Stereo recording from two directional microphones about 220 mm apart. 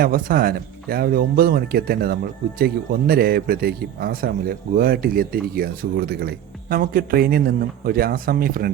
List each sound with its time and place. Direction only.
0.0 s a man's voice: 40° right (ahead or behind)